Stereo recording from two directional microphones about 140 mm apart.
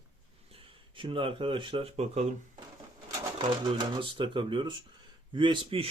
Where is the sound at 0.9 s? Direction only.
40° right (ahead or behind).